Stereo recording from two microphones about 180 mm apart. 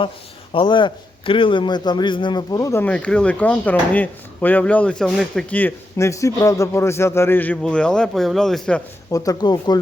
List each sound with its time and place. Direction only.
0.5 s a man's voice: 25° left (ahead or behind); by 8.8 s 5° left (ahead or behind)
9.1 s speech: 20° left (ahead or behind)